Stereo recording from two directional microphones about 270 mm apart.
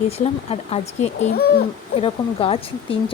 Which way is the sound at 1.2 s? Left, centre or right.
Left.